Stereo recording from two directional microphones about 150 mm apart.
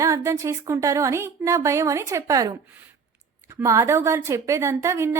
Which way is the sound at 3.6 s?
20° right (ahead or behind).